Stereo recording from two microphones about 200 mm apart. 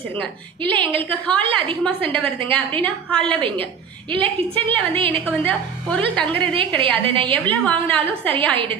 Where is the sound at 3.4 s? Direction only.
25° right (ahead or behind).